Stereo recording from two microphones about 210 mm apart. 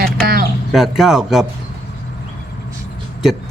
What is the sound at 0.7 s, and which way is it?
Speech, centre (ahead or behind).